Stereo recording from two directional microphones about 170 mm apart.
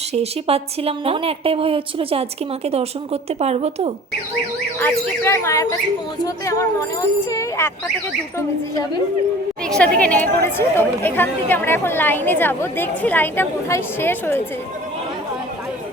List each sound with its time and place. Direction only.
0.1 s speech: 35° right (ahead or behind)
4.8 s a woman's voice: 15° left (ahead or behind)
9.6 s speech: 5° left (ahead or behind)